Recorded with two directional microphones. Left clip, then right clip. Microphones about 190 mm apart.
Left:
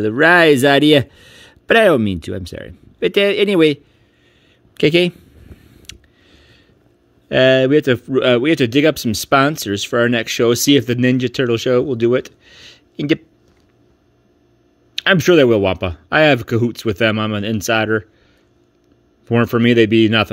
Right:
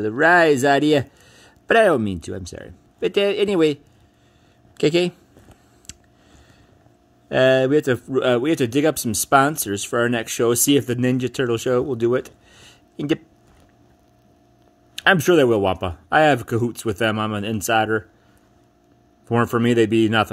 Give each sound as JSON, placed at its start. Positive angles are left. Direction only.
{"t": 0.2, "sound": "a man's voice", "side_deg": 45}
{"t": 5.8, "sound": "a sound", "side_deg": 40}
{"t": 7.2, "sound": "a man's voice", "side_deg": 35}
{"t": 15.0, "sound": "a man's voice", "side_deg": 35}
{"t": 19.4, "sound": "a man's voice", "side_deg": 35}